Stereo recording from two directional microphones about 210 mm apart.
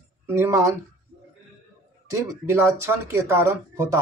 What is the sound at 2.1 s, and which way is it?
Speech, 10° right (ahead or behind).